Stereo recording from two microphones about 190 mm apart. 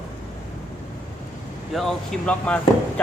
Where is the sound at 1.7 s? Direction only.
Centre (ahead or behind).